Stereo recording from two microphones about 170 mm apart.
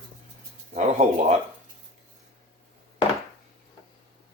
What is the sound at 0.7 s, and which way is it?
Speech, 45° right (ahead or behind).